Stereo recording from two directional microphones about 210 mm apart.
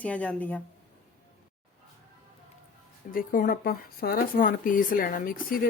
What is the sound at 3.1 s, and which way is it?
Speech, 40° left (ahead or behind).